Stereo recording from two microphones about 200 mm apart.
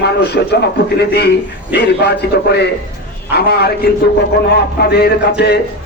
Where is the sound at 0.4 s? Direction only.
55° left (ahead or behind).